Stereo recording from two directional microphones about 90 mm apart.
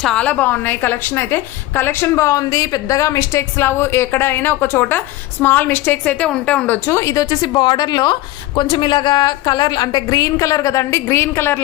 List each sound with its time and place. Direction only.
0.0 s a woman's voice: 10° left (ahead or behind)
6.8 s a woman's voice: 30° left (ahead or behind)